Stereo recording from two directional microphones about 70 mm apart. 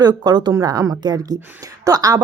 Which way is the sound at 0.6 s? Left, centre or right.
Right.